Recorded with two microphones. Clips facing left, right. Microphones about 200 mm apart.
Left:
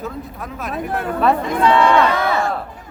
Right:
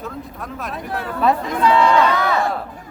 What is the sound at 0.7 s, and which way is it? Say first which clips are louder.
Speech: left 6 dB; 50° left (ahead or behind).